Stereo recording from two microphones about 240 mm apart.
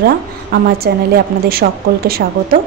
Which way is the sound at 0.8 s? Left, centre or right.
Right.